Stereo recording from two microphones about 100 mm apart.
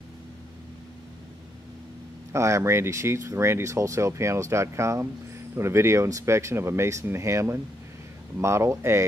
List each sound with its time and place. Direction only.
2.3 s speech: 30° right (ahead or behind)